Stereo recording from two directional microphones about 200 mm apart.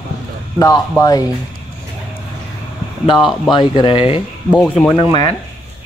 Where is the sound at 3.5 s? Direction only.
20° left (ahead or behind).